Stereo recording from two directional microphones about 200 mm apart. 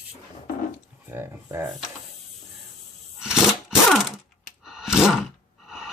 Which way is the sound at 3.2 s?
5° right (ahead or behind).